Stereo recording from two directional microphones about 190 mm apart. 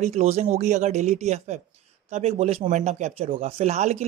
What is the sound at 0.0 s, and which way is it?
Speech, 35° right (ahead or behind).